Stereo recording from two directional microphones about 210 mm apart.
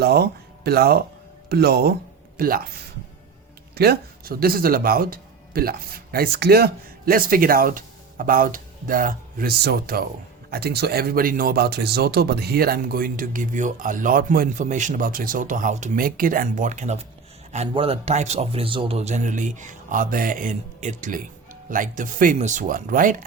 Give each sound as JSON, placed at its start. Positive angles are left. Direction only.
{"t": 0.0, "sound": "speech", "side_deg": -50}
{"t": 3.8, "sound": "speech", "side_deg": -45}